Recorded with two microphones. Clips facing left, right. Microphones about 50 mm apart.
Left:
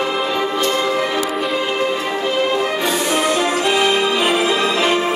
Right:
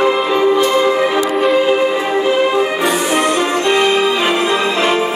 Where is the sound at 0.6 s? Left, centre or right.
Right.